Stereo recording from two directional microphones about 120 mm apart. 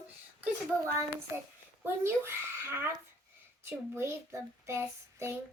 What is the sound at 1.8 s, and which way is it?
A child's voice, 20° right (ahead or behind).